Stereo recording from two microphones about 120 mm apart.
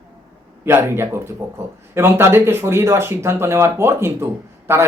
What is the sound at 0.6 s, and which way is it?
Speech, 20° right (ahead or behind).